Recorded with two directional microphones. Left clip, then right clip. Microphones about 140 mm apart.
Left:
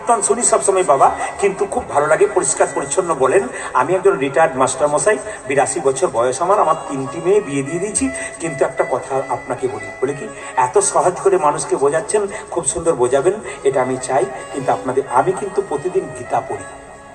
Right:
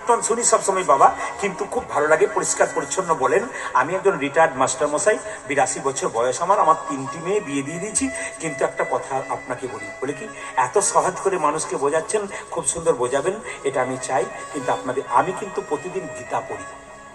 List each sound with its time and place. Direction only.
0.1 s a man's voice: 30° left (ahead or behind)